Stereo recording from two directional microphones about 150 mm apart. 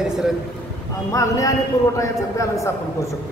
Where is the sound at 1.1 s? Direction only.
20° left (ahead or behind).